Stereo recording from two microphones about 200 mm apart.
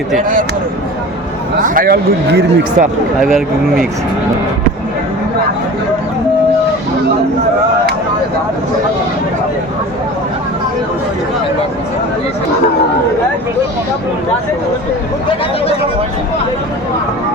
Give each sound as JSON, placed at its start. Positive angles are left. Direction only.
{"t": 1.6, "sound": "speech", "side_deg": -45}
{"t": 3.2, "sound": "speech", "side_deg": 0}